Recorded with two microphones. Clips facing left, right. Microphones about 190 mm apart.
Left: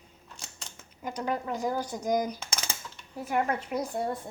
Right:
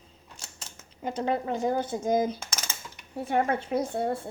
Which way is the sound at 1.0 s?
25° right (ahead or behind).